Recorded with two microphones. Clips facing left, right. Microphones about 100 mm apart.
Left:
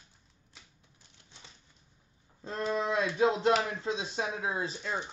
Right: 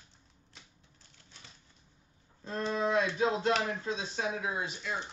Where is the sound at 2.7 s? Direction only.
25° left (ahead or behind).